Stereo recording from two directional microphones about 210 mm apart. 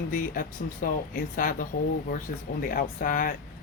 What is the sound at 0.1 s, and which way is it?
Speech, 40° left (ahead or behind).